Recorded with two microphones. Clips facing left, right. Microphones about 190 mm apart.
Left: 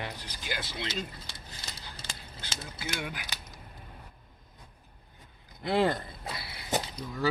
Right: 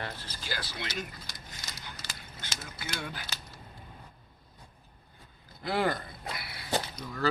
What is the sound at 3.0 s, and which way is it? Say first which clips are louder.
Speech: left 1 dB; 15° left (ahead or behind).